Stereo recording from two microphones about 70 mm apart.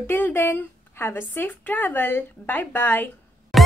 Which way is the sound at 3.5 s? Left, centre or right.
Centre.